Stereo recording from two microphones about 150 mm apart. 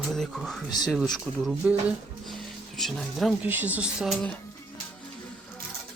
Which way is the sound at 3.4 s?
10° right (ahead or behind).